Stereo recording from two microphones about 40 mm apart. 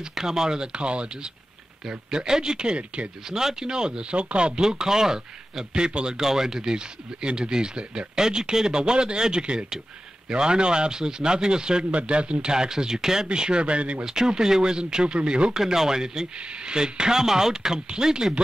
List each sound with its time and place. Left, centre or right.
0.1 s speech: centre
4.1 s speech: right
4.6 s speech: centre
14.0 s speech: centre
15.5 s speech: centre